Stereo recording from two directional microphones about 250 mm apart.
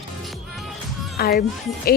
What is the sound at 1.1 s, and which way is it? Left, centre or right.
Speech, left.